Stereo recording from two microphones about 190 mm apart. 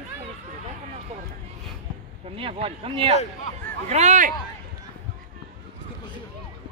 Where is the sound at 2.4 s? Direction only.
30° right (ahead or behind).